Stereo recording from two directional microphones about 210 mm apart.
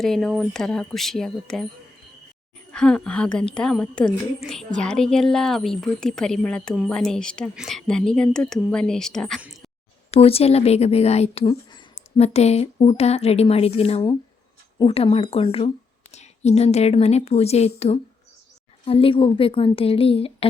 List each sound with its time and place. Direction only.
0.0 s a woman's voice: centre (ahead or behind)
2.7 s a woman's voice: 5° left (ahead or behind)
10.1 s speech: 30° left (ahead or behind)